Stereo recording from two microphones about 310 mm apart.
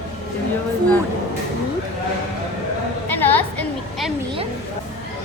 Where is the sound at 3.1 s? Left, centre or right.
Centre.